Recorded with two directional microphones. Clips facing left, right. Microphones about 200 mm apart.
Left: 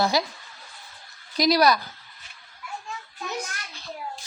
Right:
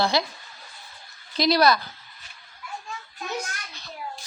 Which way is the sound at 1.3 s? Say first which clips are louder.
Even; 10° left (ahead or behind).